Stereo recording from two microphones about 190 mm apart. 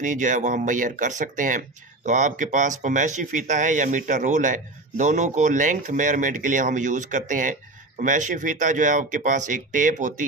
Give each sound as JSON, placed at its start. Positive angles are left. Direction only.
{"t": 0.0, "sound": "speech", "side_deg": -40}